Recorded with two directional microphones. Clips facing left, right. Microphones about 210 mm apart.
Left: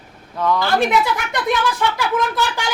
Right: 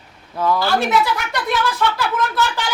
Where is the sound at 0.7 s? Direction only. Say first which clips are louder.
Left 1 dB; 15° left (ahead or behind).